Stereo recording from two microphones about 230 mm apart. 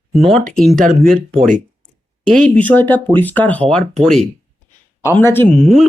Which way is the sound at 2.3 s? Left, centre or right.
Centre.